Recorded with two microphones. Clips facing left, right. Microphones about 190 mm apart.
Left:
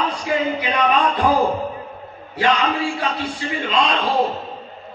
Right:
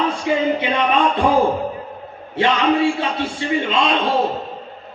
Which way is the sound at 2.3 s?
25° right (ahead or behind).